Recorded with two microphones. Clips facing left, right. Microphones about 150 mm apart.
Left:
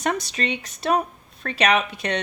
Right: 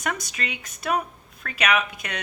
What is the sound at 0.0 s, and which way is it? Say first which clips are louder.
Speech: left 5 dB; 30° left (ahead or behind).